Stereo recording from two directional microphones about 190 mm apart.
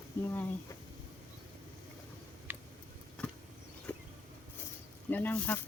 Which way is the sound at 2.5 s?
10° right (ahead or behind).